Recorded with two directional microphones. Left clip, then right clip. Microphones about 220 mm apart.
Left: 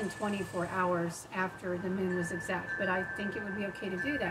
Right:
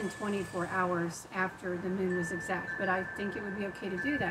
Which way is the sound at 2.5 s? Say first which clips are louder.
Even; centre (ahead or behind).